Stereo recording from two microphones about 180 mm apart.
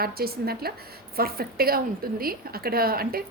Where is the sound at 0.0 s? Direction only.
60° right (ahead or behind).